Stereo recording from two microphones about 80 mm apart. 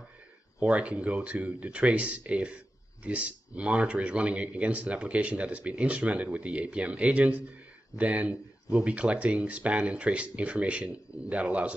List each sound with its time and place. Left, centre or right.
0.6 s speech: centre